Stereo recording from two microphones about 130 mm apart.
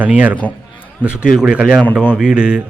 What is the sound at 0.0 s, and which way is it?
Speech, 10° right (ahead or behind).